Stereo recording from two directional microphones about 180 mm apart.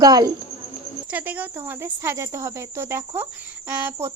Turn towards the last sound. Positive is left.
turn(degrees=-15)  # may be behind; listen again after turning